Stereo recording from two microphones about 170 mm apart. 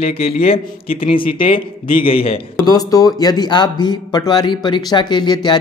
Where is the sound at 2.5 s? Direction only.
20° left (ahead or behind).